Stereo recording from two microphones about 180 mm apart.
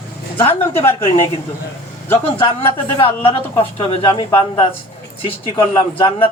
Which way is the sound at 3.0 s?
30° left (ahead or behind).